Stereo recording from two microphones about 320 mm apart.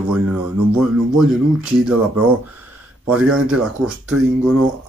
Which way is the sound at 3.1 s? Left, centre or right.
Centre.